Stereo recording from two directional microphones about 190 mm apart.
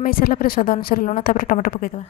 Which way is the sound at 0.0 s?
50° left (ahead or behind).